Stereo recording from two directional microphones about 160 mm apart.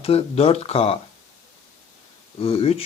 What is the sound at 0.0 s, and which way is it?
Speech, 40° left (ahead or behind).